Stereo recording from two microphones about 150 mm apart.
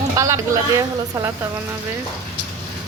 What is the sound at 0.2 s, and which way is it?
A woman's voice, 25° right (ahead or behind).